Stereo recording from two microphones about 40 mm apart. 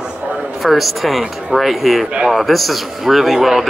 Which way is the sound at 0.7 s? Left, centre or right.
Centre.